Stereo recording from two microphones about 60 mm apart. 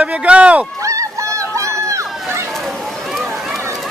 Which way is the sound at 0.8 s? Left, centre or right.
Right.